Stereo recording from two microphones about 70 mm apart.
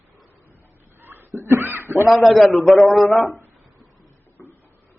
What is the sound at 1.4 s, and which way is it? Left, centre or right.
Speech, right.